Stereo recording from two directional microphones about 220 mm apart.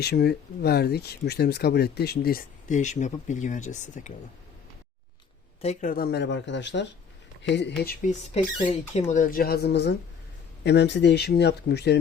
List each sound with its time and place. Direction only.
0.0 s speech: 45° left (ahead or behind)
5.6 s speech: 40° left (ahead or behind); by 7.6 s 55° left (ahead or behind)
7.8 s speech: 40° left (ahead or behind)
8.3 s speech: 25° left (ahead or behind); by 11.9 s 50° left (ahead or behind)